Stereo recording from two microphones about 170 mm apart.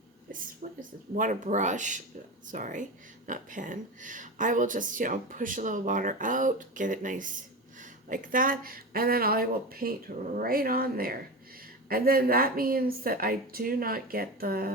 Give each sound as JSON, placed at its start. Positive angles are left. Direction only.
{"t": 0.3, "sound": "a woman's voice", "side_deg": -55}